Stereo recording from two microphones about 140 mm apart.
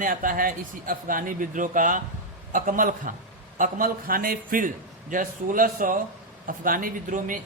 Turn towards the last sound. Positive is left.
turn(degrees=-70)  # may be behind; listen again after turning